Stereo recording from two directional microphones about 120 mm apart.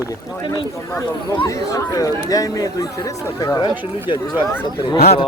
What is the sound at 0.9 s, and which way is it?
Speech, 25° left (ahead or behind).